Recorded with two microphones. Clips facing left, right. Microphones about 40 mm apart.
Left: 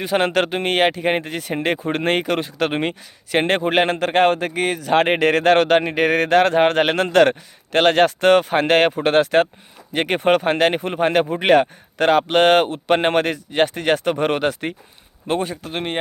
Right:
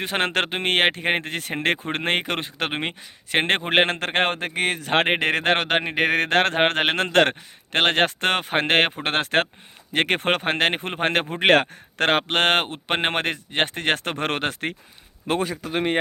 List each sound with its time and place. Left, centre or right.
0.0 s speech: right
2.0 s a man's voice: right
3.3 s a man's voice: right
5.0 s speech: right
6.2 s a man's voice: right
9.9 s speech: right
10.2 s a man's voice: right
11.3 s speech: right